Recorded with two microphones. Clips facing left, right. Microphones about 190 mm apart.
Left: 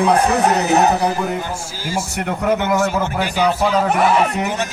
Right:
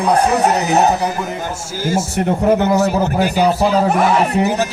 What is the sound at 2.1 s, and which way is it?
A man's voice, 30° right (ahead or behind).